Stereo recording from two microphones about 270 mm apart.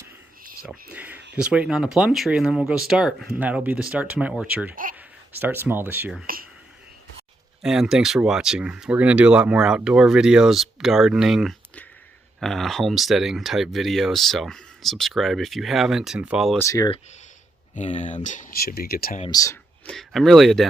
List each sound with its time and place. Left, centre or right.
0.6 s speech: centre
4.7 s speech: right
4.9 s speech: centre
6.2 s speech: right
7.6 s speech: centre
16.6 s speech: centre
17.7 s speech: left
19.2 s speech: centre